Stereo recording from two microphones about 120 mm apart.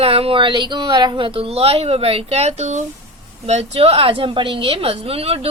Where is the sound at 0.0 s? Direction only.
55° right (ahead or behind).